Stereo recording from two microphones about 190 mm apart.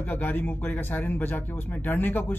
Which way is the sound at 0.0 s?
10° left (ahead or behind).